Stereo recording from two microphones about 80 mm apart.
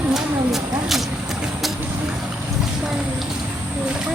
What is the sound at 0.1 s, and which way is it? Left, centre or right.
Vehicle, centre.